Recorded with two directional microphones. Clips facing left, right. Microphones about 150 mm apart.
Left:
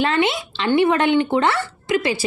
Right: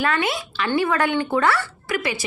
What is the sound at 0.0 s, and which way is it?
Speech, 25° left (ahead or behind).